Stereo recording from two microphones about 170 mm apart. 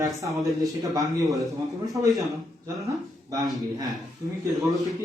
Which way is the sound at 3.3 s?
20° right (ahead or behind).